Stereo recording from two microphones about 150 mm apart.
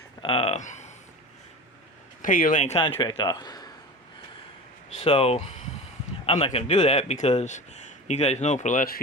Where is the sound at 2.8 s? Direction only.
30° left (ahead or behind).